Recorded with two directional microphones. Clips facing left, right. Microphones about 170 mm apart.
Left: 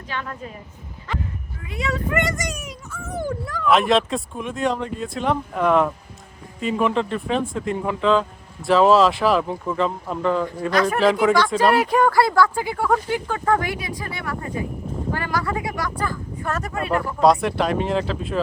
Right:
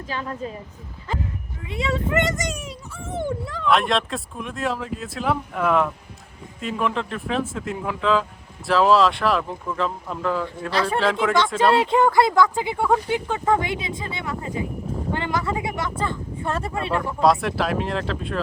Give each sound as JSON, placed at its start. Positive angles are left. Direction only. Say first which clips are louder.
{"t": 0.1, "sound": "speech", "louder": "right 2 dB", "side_deg": -30}
{"t": 1.6, "sound": "speech", "louder": "right 1 dB", "side_deg": -25}
{"t": 3.7, "sound": "speech", "louder": "left 3 dB", "side_deg": 0}
{"t": 10.7, "sound": "speech", "louder": "left 3 dB", "side_deg": -30}
{"t": 11.0, "sound": "speech", "louder": "left 7 dB", "side_deg": 0}
{"t": 11.7, "sound": "speech", "louder": "even", "side_deg": -25}
{"t": 17.2, "sound": "speech", "louder": "left 2 dB", "side_deg": 0}